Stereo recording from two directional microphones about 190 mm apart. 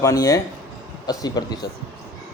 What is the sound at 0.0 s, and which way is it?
A man's voice, 20° left (ahead or behind).